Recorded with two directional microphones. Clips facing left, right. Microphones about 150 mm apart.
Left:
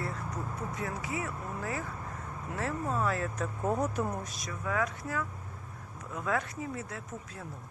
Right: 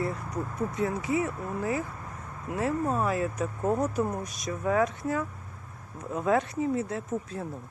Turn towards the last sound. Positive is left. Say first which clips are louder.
# right 10 dB
turn(degrees=-30)  # may be behind; listen again after turning